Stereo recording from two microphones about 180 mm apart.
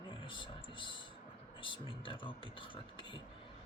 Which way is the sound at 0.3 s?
25° left (ahead or behind).